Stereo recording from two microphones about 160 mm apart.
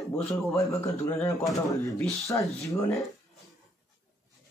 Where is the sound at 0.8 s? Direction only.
15° left (ahead or behind).